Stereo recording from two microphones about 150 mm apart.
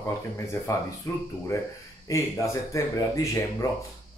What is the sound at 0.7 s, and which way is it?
Speech, 20° left (ahead or behind).